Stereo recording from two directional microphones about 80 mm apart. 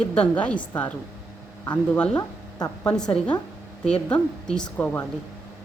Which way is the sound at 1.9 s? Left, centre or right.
Centre.